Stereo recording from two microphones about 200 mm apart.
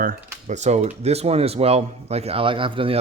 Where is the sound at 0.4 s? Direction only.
35° right (ahead or behind).